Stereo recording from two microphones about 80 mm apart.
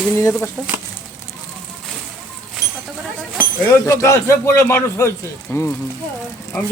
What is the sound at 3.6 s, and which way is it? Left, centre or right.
Speech, left.